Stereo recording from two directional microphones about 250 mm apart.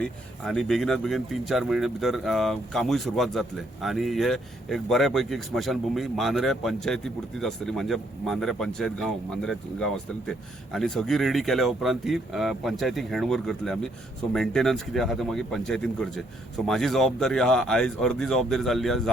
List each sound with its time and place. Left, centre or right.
0.0 s speech: centre